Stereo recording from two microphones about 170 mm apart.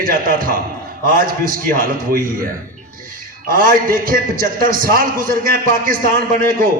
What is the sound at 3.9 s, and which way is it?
A man's voice, 55° right (ahead or behind).